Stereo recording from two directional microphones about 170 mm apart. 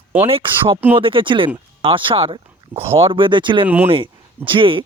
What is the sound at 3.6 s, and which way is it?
Speech, 10° right (ahead or behind).